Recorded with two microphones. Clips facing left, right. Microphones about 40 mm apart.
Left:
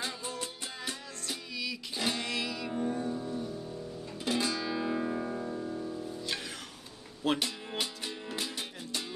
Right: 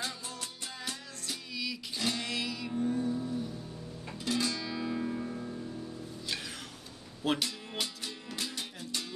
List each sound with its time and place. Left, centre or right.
0.0 s music: centre
2.0 s music: centre
2.2 s music: centre
4.2 s guitar: centre
7.3 s music: centre